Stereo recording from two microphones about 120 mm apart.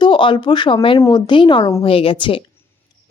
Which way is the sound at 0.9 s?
25° left (ahead or behind).